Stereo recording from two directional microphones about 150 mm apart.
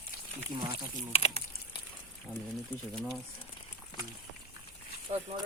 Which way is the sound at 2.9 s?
Centre (ahead or behind).